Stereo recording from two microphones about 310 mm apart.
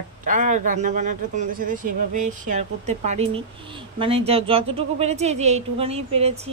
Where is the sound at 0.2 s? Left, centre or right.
Right.